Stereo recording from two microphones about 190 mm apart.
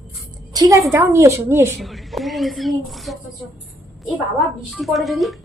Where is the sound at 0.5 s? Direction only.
20° right (ahead or behind).